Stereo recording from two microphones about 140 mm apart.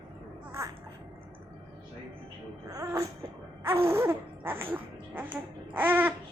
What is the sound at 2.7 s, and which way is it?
Music, 25° right (ahead or behind).